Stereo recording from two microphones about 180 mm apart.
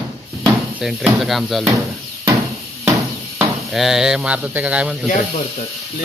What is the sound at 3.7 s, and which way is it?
Speech, centre (ahead or behind).